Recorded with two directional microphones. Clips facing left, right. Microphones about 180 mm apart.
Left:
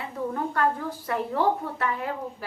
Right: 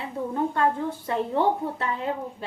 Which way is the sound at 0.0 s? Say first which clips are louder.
Right 2 dB; 25° right (ahead or behind).